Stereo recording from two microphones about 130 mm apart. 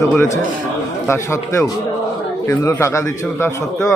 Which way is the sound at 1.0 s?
20° left (ahead or behind).